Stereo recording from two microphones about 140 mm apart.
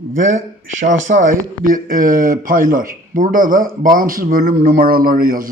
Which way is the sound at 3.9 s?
85° right.